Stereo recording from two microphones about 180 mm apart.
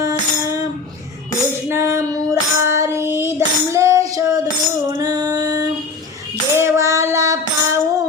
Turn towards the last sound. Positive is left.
turn(degrees=-15)  # may be behind; listen again after turning